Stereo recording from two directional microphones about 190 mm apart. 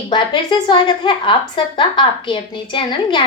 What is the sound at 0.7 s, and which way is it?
A woman's voice, 25° left (ahead or behind).